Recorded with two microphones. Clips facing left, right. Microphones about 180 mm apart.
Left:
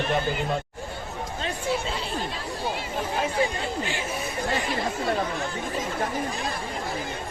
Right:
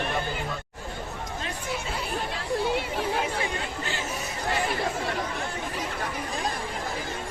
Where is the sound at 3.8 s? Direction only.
15° left (ahead or behind).